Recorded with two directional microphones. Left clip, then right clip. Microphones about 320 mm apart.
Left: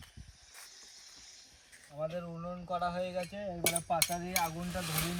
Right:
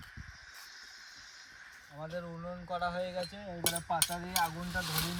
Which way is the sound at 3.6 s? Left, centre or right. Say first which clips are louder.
Left 1 dB; right.